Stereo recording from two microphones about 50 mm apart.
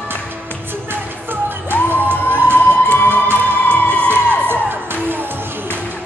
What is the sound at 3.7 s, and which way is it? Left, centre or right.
Music, left.